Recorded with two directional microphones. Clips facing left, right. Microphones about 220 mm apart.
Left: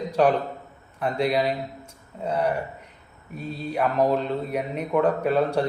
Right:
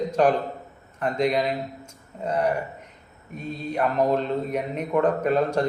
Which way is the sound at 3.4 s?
5° left (ahead or behind).